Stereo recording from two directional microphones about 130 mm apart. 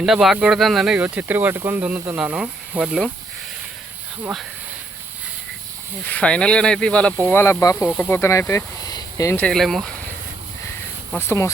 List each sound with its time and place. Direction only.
0.0 s speech: 5° right (ahead or behind)
6.1 s speech: 10° left (ahead or behind)
8.2 s speech: 20° left (ahead or behind)
9.5 s speech: centre (ahead or behind)
11.2 s speech: 20° left (ahead or behind)